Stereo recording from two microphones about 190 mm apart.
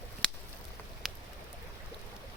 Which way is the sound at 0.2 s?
5° left (ahead or behind).